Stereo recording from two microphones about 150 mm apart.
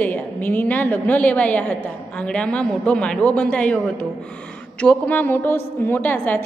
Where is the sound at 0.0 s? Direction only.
10° left (ahead or behind).